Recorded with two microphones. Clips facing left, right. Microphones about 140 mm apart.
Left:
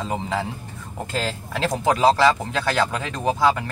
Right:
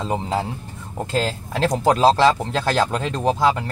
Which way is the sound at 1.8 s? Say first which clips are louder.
Right 2 dB; 30° right (ahead or behind).